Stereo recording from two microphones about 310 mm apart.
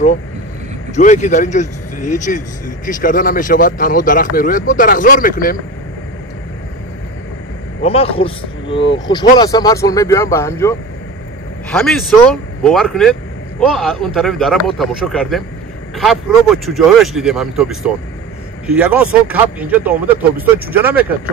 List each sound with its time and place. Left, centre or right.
0.9 s speech: left
7.8 s speech: centre